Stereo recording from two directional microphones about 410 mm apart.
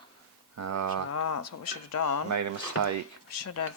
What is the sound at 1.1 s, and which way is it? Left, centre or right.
Speech, left.